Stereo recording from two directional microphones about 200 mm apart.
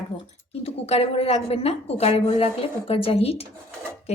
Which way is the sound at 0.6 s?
30° left (ahead or behind).